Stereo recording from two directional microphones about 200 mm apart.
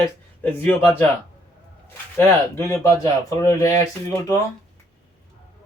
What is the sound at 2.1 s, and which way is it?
Speech, 15° left (ahead or behind).